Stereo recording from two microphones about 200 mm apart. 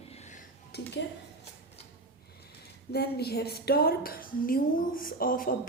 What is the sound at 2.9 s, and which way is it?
A woman's voice, 55° left (ahead or behind).